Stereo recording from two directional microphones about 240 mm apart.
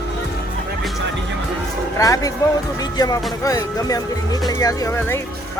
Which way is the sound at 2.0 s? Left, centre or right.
Centre.